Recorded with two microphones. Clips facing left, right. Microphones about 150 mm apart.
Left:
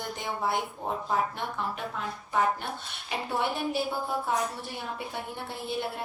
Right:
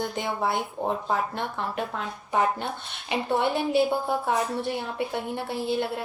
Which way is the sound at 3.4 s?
60° right (ahead or behind).